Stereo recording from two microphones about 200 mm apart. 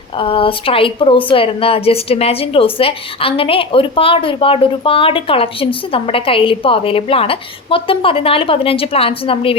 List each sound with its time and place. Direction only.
0.2 s a woman's voice: 25° left (ahead or behind)